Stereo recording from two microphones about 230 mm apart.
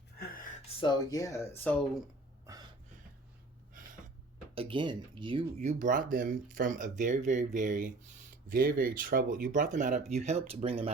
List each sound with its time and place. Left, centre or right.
0.2 s a sound: left
0.8 s speech: centre
4.5 s speech: right